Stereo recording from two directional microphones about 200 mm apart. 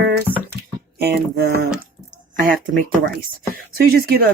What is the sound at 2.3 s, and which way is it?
Speech, 40° right (ahead or behind).